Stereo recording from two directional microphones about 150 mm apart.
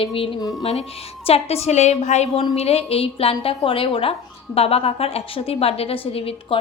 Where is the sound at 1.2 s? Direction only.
45° left (ahead or behind).